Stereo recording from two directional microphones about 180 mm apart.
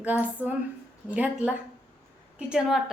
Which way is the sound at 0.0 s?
10° right (ahead or behind).